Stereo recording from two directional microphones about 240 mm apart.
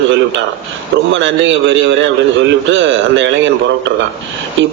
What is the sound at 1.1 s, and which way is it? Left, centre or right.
Speech, right.